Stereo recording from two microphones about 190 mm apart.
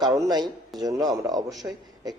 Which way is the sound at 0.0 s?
20° right (ahead or behind).